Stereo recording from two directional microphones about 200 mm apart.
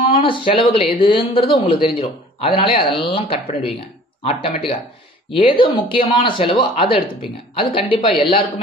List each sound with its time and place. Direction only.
0.2 s speech: 25° left (ahead or behind)